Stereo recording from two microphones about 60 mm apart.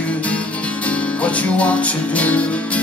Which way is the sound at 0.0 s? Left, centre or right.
Left.